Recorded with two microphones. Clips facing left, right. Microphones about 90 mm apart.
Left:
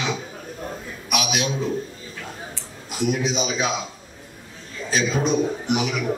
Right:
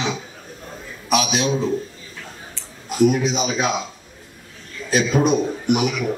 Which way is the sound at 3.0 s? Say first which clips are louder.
Right 5 dB; 45° right (ahead or behind).